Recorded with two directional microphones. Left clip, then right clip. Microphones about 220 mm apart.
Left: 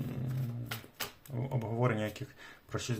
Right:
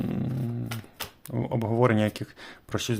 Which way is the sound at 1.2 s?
50° right (ahead or behind).